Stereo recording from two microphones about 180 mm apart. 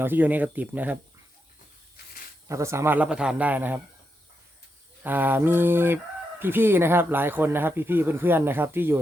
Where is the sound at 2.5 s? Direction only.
15° right (ahead or behind).